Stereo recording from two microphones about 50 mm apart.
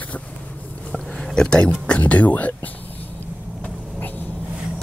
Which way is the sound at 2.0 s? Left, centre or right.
Left.